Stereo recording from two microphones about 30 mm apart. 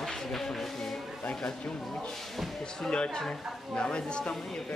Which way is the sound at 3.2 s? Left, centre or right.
Left.